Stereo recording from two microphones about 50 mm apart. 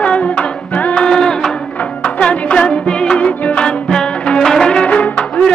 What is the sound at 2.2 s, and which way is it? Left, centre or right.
Music, centre.